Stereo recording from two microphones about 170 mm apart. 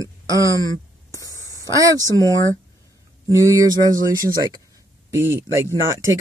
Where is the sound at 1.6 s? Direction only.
20° right (ahead or behind).